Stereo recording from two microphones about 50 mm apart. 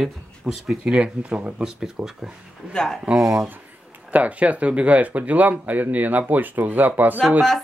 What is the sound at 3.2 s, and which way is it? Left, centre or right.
Speech, right.